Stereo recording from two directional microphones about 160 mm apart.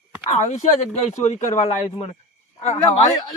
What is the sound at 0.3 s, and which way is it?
Speech, 45° left (ahead or behind).